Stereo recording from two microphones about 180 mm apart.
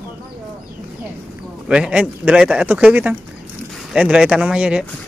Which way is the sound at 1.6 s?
5° right (ahead or behind).